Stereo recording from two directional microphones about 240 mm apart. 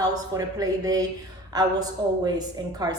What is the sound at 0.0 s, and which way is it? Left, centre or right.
A woman's voice, centre.